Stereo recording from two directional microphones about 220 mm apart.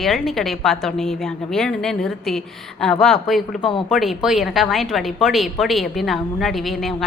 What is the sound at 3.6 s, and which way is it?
Speech, 20° left (ahead or behind).